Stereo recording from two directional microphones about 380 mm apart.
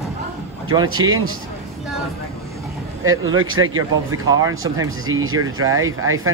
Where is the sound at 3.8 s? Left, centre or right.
Centre.